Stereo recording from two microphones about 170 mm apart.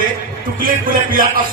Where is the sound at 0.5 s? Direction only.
55° right (ahead or behind).